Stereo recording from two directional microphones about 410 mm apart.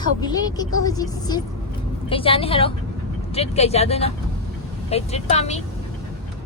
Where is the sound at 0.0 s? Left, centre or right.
Centre.